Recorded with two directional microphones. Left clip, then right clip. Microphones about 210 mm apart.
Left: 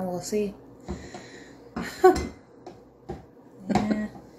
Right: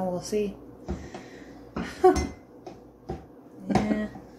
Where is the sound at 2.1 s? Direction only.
30° left (ahead or behind).